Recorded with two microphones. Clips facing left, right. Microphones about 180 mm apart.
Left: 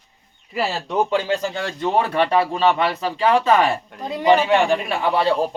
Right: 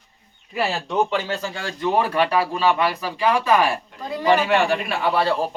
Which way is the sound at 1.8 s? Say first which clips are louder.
Even; 25° left (ahead or behind).